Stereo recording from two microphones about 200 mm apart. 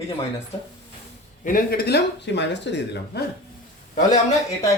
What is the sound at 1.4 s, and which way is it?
Speech, 45° left (ahead or behind).